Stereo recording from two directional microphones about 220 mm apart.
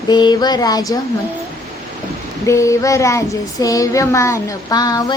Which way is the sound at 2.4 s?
15° left (ahead or behind).